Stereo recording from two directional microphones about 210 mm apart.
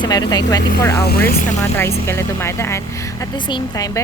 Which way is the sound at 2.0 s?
10° left (ahead or behind).